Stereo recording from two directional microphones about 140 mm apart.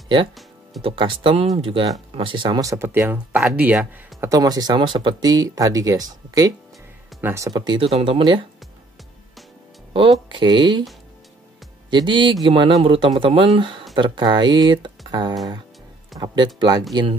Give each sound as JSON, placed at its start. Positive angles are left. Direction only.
{"t": 0.8, "sound": "speech", "side_deg": -35}
{"t": 4.2, "sound": "speech", "side_deg": -25}
{"t": 10.3, "sound": "speech", "side_deg": -35}
{"t": 11.9, "sound": "speech", "side_deg": -35}
{"t": 16.1, "sound": "speech", "side_deg": 0}
{"t": 16.5, "sound": "speech", "side_deg": -30}